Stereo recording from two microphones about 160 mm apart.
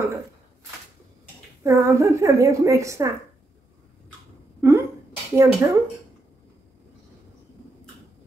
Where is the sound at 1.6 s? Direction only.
20° right (ahead or behind).